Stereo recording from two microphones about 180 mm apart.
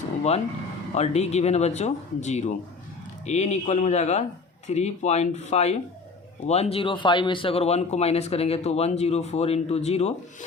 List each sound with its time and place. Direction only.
0.2 s speech: 35° left (ahead or behind)